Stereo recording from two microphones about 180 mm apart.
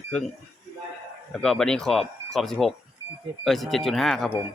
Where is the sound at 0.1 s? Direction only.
5° left (ahead or behind).